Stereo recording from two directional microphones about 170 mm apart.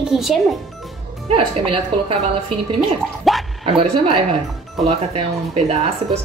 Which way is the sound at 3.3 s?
Centre (ahead or behind).